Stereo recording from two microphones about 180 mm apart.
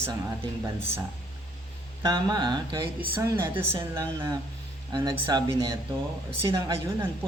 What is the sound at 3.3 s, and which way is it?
A woman's voice, 15° right (ahead or behind).